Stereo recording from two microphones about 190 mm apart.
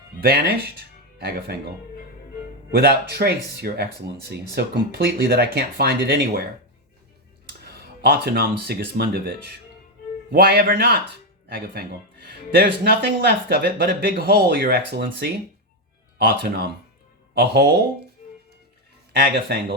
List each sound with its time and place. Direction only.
0.2 s speech: 55° right (ahead or behind)
2.7 s speech: 55° right (ahead or behind)
7.6 s speech: 55° right (ahead or behind)
18.2 s music: 45° left (ahead or behind)
19.1 s speech: 55° right (ahead or behind)